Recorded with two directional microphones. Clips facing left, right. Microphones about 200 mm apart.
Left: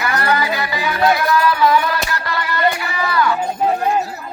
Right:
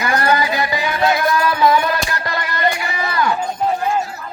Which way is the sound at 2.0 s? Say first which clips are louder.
Left 1 dB; 20° right (ahead or behind).